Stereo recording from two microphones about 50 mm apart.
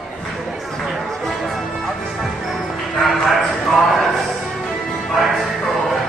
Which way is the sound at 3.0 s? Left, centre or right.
Centre.